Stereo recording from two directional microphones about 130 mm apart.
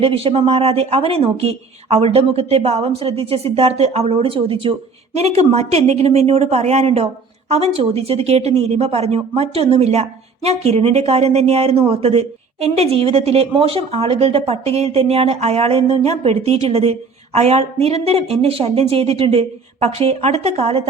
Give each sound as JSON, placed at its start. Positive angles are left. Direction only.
{"t": 0.0, "sound": "speech", "side_deg": -45}
{"t": 5.1, "sound": "speech", "side_deg": -55}